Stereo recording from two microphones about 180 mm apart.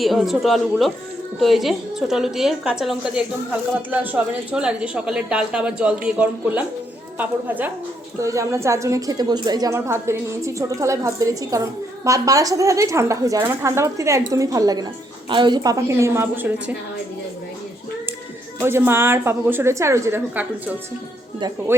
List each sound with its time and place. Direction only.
0.0 s a woman's voice: centre (ahead or behind)
18.6 s a woman's voice: 15° right (ahead or behind)